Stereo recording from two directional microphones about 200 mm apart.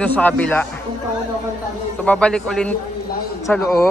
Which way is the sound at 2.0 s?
5° left (ahead or behind).